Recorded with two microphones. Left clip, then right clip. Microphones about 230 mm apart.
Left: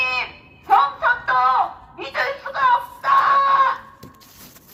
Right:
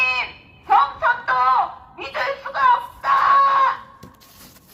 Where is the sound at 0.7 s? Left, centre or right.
Right.